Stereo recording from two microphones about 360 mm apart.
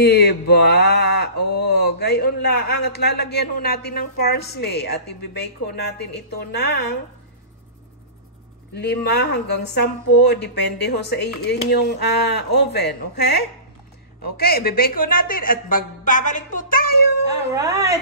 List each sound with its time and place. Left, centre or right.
0.0 s a man's voice: left
8.7 s a man's voice: left
17.6 s a woman's voice: centre